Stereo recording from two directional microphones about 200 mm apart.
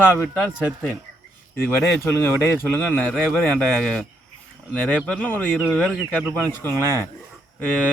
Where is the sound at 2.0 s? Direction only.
10° left (ahead or behind).